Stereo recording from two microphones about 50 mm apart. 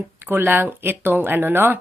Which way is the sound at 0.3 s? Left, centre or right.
Right.